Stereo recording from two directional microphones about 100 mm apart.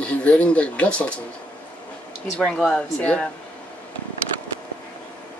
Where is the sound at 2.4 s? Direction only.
5° left (ahead or behind).